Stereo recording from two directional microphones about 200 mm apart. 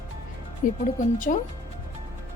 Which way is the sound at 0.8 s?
40° left (ahead or behind).